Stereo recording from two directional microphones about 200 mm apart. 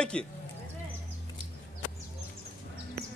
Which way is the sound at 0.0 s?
5° left (ahead or behind).